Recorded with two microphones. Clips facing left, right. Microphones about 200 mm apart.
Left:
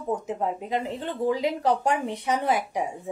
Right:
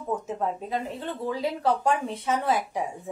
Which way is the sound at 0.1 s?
15° left (ahead or behind).